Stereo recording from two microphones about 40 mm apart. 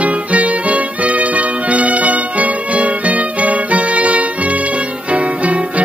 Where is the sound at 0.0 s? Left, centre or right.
Right.